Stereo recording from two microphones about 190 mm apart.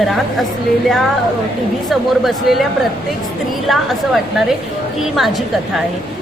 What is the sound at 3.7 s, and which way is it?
Speech, centre (ahead or behind).